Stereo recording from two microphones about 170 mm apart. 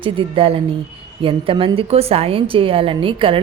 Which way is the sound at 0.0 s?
30° right (ahead or behind).